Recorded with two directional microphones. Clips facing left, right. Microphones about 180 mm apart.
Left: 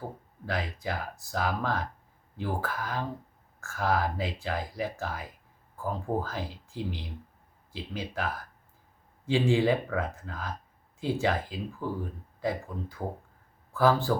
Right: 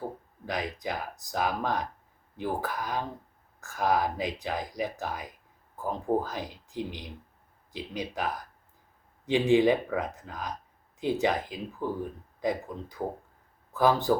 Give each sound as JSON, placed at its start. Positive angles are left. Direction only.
{"t": 0.4, "sound": "speech", "side_deg": -15}